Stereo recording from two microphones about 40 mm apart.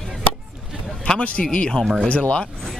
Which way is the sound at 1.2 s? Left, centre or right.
Left.